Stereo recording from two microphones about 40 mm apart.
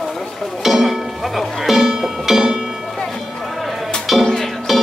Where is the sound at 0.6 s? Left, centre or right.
Centre.